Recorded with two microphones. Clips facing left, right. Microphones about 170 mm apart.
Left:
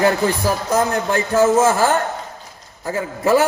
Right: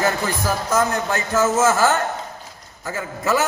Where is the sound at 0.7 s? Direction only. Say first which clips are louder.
Left 2 dB; 30° left (ahead or behind).